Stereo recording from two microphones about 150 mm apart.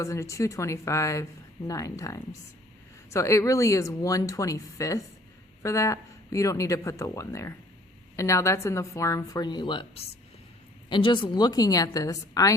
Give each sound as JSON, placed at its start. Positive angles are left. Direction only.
{"t": 0.0, "sound": "speech", "side_deg": 20}